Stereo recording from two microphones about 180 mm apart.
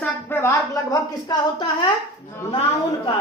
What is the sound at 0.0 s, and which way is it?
Speech, 10° left (ahead or behind).